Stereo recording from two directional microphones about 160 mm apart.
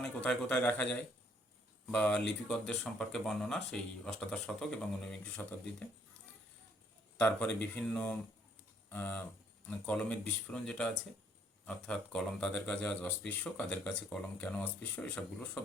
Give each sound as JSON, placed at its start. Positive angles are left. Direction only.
{"t": 0.0, "sound": "speech", "side_deg": 5}
{"t": 7.2, "sound": "speech", "side_deg": 10}